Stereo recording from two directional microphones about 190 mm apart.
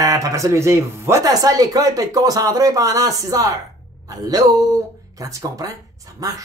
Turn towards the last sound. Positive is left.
turn(degrees=-20)  # may be behind; listen again after turning